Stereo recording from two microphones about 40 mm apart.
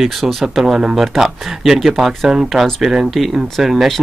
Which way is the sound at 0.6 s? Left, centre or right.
Centre.